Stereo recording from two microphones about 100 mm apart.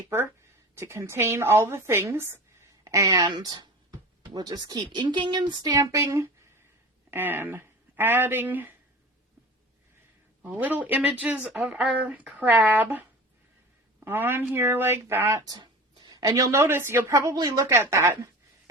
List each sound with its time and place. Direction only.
0.8 s a woman's voice: 25° right (ahead or behind)
6.0 s a woman's voice: 30° right (ahead or behind)
10.4 s speech: 15° right (ahead or behind)
11.5 s a woman's voice: 5° right (ahead or behind); by 15.5 s 30° right (ahead or behind)
15.5 s a sound: 45° right (ahead or behind)
16.2 s a woman's voice: 30° right (ahead or behind)